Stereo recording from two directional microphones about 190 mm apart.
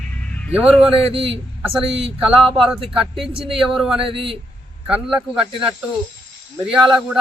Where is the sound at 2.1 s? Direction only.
5° right (ahead or behind).